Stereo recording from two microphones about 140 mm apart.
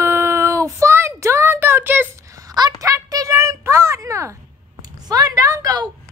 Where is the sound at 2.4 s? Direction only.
30° right (ahead or behind).